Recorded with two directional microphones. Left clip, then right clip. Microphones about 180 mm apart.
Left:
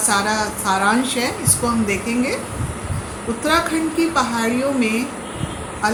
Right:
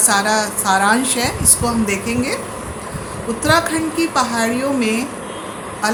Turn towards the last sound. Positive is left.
turn(degrees=-35)  # may be behind; listen again after turning